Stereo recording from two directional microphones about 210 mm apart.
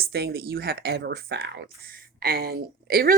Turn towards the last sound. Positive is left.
turn(degrees=-45)  # may be behind; listen again after turning